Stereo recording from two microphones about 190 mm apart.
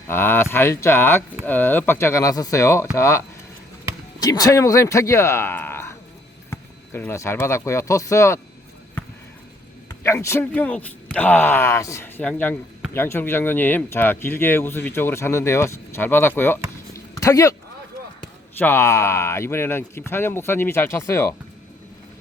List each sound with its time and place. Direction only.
0.1 s speech: 10° left (ahead or behind)
9.9 s speech: 15° left (ahead or behind)
16.9 s a sound: 15° left (ahead or behind)
18.5 s speech: 10° left (ahead or behind)